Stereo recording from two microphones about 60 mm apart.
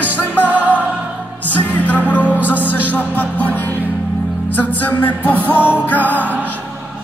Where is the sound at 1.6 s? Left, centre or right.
Left.